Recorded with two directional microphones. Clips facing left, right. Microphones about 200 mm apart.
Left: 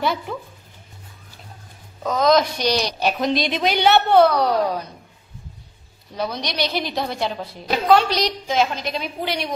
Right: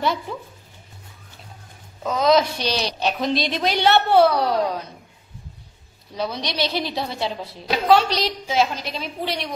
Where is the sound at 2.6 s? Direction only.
30° right (ahead or behind).